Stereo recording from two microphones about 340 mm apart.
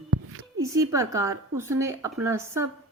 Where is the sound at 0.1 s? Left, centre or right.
Right.